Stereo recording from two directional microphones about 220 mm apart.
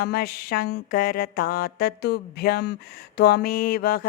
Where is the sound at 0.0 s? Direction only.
45° left (ahead or behind).